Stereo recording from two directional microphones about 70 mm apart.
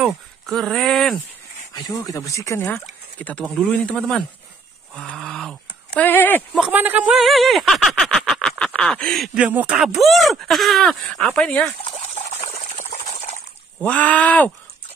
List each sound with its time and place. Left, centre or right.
0.5 s speech: centre
1.7 s speech: left
3.2 s speech: left
5.9 s speech: left
6.7 s speech: right
7.2 s speech: centre
8.4 s a sound: centre
9.4 s speech: right
9.9 s speech: centre
13.7 s speech: centre